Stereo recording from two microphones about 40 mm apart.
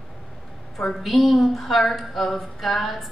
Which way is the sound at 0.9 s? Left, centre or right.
Centre.